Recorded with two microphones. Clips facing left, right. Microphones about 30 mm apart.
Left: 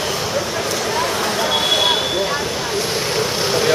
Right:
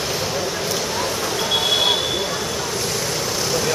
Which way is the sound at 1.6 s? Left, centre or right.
Left.